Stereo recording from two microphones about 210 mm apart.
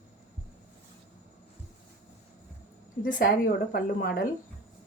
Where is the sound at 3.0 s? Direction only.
40° left (ahead or behind).